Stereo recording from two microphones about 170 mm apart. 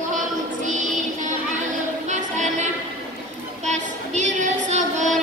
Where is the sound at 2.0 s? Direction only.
45° right (ahead or behind).